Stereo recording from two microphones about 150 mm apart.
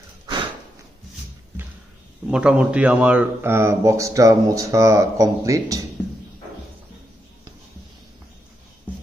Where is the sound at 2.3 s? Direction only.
5° right (ahead or behind); by 5.8 s 20° right (ahead or behind).